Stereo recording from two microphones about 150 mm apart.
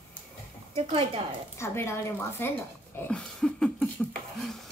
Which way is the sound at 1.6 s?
15° left (ahead or behind).